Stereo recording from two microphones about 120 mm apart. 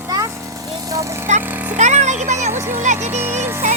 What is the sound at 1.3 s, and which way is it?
Speech, 80° right.